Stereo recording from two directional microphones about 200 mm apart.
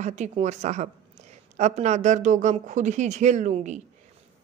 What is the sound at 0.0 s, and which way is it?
Speech, 35° right (ahead or behind).